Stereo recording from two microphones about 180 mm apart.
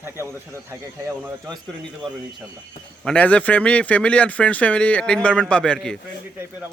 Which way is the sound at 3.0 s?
5° left (ahead or behind).